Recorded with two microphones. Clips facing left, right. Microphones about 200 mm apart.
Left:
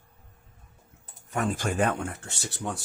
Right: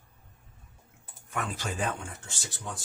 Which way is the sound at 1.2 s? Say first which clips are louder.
Left 6 dB; 45° left (ahead or behind).